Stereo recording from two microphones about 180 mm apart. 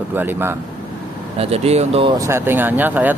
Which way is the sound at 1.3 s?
35° right (ahead or behind).